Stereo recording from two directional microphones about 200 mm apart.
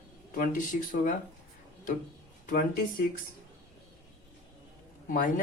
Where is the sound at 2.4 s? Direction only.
40° left (ahead or behind).